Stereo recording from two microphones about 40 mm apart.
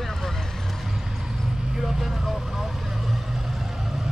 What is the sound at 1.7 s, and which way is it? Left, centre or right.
Speech, centre.